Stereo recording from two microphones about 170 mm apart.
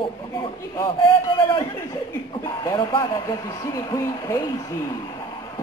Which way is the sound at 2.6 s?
25° left (ahead or behind).